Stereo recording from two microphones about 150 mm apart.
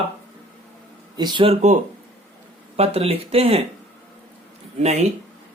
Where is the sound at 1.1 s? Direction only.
30° right (ahead or behind).